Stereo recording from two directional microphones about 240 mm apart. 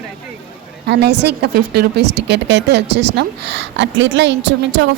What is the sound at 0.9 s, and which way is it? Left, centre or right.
A woman's voice, right.